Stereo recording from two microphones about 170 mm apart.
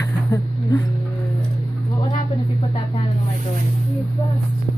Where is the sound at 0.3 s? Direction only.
15° left (ahead or behind).